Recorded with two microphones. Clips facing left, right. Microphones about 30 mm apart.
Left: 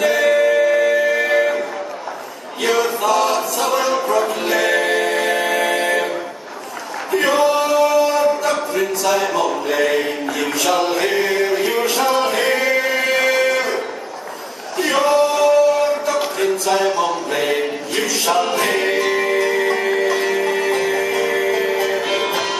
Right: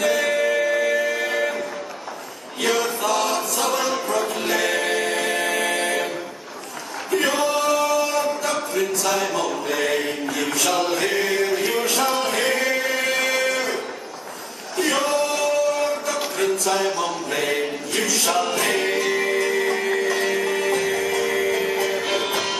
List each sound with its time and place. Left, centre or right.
0.0 s music: centre
2.6 s a capella: centre
7.1 s male singing: centre
14.8 s male singing: centre
16.6 s a sound: centre
18.2 s music: centre